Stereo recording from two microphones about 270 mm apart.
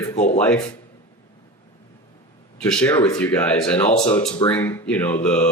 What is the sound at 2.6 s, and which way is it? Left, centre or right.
Speech, centre.